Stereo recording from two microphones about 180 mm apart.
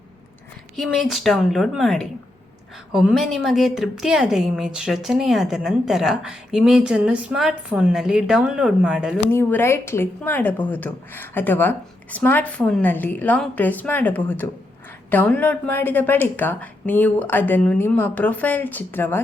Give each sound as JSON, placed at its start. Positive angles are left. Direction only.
{"t": 0.8, "sound": "a woman's voice", "side_deg": 0}
{"t": 9.3, "sound": "a woman's voice", "side_deg": 10}